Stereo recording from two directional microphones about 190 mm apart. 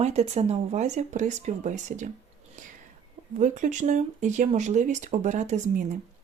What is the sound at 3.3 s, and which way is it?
Speech, 40° right (ahead or behind).